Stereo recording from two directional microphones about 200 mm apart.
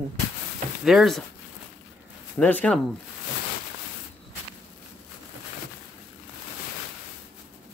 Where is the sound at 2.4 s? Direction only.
5° left (ahead or behind).